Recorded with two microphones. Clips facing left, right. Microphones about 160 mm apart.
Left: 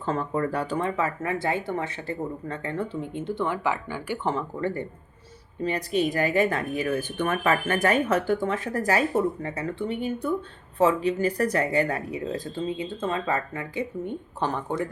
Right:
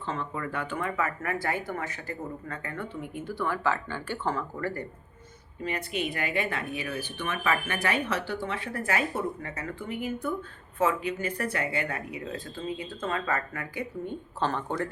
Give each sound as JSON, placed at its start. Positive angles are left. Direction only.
{"t": 0.0, "sound": "speech", "side_deg": 45}
{"t": 5.6, "sound": "speech", "side_deg": 35}